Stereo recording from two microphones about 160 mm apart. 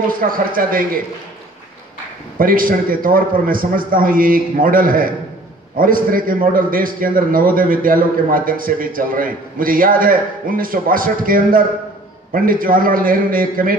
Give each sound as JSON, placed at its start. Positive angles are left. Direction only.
{"t": 0.2, "sound": "a man's voice", "side_deg": -55}
{"t": 2.3, "sound": "a man's voice", "side_deg": -60}